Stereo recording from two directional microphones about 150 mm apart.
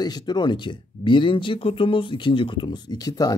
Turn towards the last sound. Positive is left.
turn(degrees=25)  # may be behind; listen again after turning